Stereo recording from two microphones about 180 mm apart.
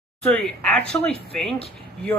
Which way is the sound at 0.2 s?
10° left (ahead or behind).